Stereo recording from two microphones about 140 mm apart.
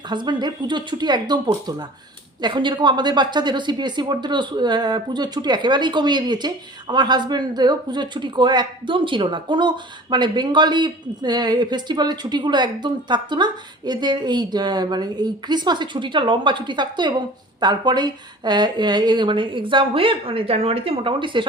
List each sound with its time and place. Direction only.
0.1 s a woman's voice: 30° right (ahead or behind)
2.4 s a woman's voice: 35° right (ahead or behind)